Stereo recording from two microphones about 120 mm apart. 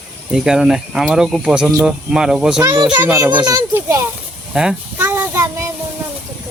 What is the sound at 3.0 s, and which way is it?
Speech, 15° right (ahead or behind).